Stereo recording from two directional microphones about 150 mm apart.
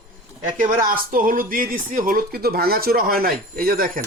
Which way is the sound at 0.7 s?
70° right (ahead or behind).